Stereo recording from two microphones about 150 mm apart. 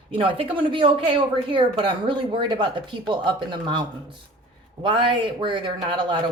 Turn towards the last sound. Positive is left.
turn(degrees=-30)  # may be behind; listen again after turning